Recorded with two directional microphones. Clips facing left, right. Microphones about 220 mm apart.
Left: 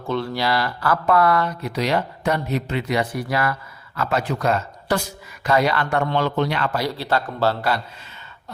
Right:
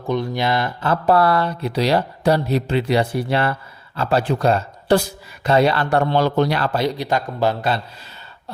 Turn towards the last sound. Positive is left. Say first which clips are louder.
# right 1 dB
turn(degrees=-20)  # may be behind; listen again after turning